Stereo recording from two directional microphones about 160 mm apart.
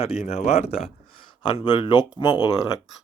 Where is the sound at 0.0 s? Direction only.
40° left (ahead or behind).